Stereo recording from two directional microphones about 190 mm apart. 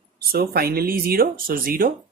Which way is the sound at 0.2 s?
55° right (ahead or behind).